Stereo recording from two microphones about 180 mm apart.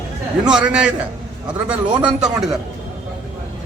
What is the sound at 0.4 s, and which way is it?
Speech, 5° right (ahead or behind).